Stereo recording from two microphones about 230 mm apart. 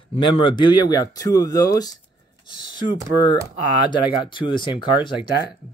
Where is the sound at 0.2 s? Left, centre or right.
Left.